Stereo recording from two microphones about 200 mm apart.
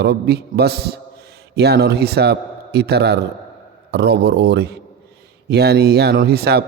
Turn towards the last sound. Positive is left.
turn(degrees=-55)  # may be behind; listen again after turning